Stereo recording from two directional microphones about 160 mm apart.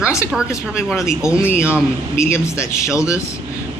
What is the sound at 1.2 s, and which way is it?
A woman's voice, 15° left (ahead or behind).